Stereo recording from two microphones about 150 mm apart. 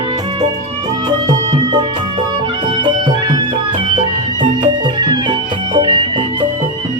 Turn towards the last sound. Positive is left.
turn(degrees=-30)  # may be behind; listen again after turning